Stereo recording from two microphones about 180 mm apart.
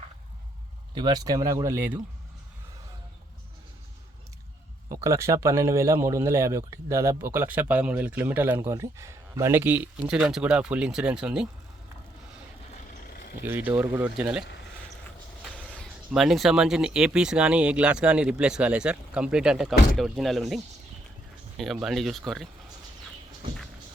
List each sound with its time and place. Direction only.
0.9 s speech: 25° right (ahead or behind)
4.9 s speech: 15° right (ahead or behind)
13.4 s speech: 10° right (ahead or behind)
15.5 s speech: 5° left (ahead or behind)
21.6 s speech: centre (ahead or behind)